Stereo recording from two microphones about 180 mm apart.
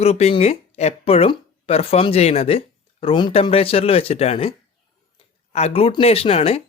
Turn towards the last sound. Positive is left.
turn(degrees=35)  # may be behind; listen again after turning